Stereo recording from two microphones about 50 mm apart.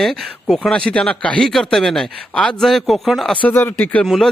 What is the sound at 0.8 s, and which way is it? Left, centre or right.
Speech, left.